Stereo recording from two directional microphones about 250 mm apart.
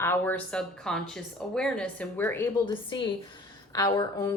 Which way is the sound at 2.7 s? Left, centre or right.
Centre.